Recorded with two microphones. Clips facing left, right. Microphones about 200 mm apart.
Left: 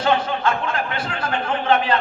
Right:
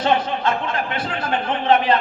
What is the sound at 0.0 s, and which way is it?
A man's voice, 25° right (ahead or behind).